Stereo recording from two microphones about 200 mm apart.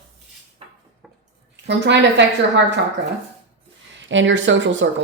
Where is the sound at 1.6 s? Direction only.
60° right (ahead or behind).